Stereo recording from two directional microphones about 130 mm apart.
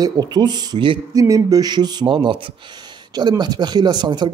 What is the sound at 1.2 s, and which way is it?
Speech, 25° right (ahead or behind).